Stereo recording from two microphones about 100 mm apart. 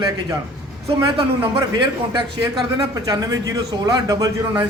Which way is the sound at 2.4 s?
30° right (ahead or behind).